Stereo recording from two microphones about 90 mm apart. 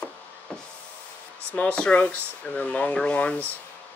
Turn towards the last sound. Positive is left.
turn(degrees=15)  # may be behind; listen again after turning